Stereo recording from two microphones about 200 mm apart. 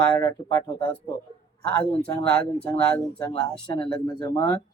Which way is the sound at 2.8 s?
5° left (ahead or behind).